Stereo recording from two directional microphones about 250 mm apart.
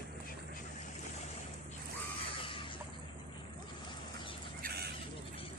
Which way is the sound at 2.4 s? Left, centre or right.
Left.